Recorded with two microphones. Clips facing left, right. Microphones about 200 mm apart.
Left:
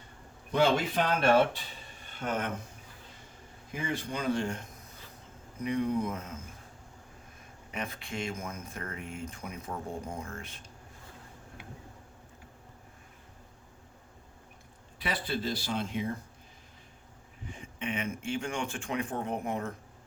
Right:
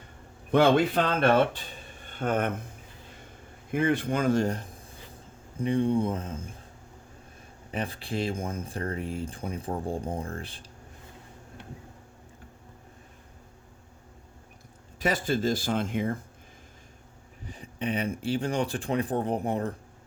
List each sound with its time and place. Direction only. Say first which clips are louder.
0.5 s speech: right 5 dB; 60° right (ahead or behind)
3.7 s speech: right 9 dB; 60° right (ahead or behind); by 6.4 s 30° right (ahead or behind)
7.7 s speech: right 6 dB; 35° right (ahead or behind)
14.9 s speech: right 7 dB; 45° right (ahead or behind)
17.5 s speech: right 5 dB; 35° right (ahead or behind)